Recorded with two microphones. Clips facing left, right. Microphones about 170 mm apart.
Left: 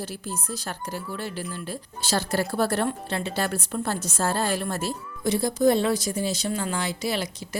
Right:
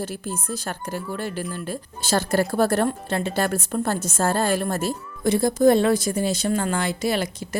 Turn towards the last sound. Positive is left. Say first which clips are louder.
# right 4 dB
turn(degrees=-50)  # may be behind; listen again after turning